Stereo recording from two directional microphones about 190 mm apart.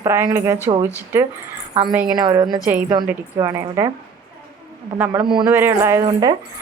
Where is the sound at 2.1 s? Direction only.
20° right (ahead or behind).